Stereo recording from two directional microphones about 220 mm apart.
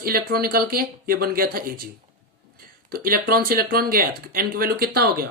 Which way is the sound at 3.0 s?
40° right (ahead or behind).